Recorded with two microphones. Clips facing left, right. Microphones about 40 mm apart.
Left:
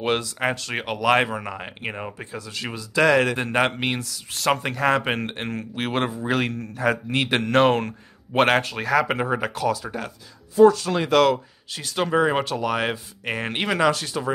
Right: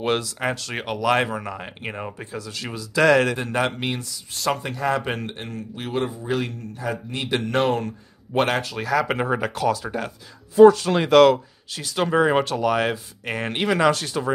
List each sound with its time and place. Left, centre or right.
0.0 s speech: centre
2.3 s speech: left
3.3 s a man's voice: left
4.3 s a man's voice: left
5.4 s a man's voice: left
7.5 s speech: left
8.3 s a man's voice: left
9.0 s speech: centre
10.7 s speech: right
11.1 s speech: centre